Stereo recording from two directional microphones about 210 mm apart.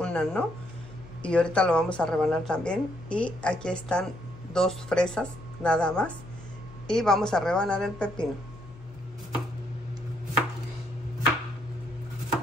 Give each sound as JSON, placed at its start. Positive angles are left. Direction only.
{"t": 0.0, "sound": "speech", "side_deg": 5}